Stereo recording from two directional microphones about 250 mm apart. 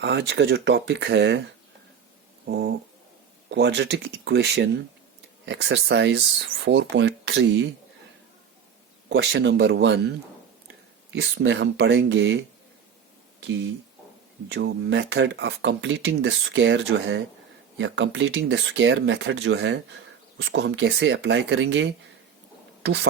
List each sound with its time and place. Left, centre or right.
0.0 s speech: right
2.5 s a sound: right
3.5 s speech: right
9.0 s speech: right
11.1 s speech: right
14.5 s speech: right